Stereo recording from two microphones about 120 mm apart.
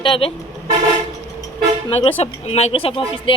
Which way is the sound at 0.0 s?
45° left (ahead or behind).